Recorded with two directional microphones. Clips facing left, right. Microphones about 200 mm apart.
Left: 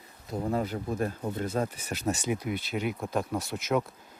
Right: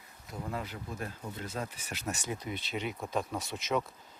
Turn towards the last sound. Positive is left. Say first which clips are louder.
# left 4 dB
turn(degrees=5)  # may be behind; listen again after turning